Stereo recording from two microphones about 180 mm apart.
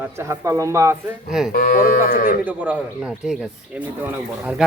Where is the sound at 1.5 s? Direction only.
55° left (ahead or behind).